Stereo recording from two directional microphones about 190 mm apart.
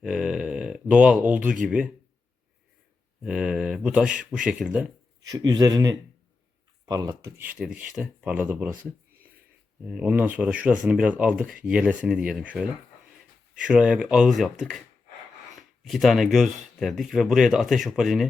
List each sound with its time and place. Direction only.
0.0 s speech: 5° right (ahead or behind)
3.2 s speech: 5° right (ahead or behind)
5.2 s speech: 20° right (ahead or behind); by 14.8 s centre (ahead or behind)
15.8 s speech: centre (ahead or behind)